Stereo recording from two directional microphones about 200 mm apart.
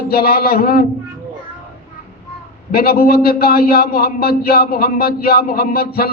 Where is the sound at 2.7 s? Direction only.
50° left (ahead or behind).